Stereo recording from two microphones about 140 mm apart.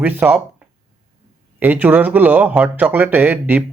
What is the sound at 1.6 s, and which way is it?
Speech, 15° right (ahead or behind).